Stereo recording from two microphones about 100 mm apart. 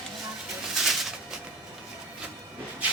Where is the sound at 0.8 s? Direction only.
Centre (ahead or behind).